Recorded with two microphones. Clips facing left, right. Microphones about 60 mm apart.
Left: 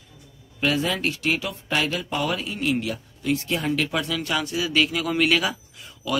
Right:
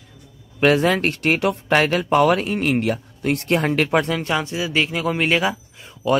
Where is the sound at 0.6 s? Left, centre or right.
Right.